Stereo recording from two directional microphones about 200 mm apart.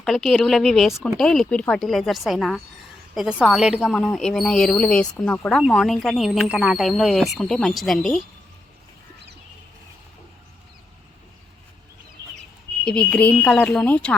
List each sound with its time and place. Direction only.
0.0 s a woman's voice: centre (ahead or behind)
12.8 s a woman's voice: 5° left (ahead or behind)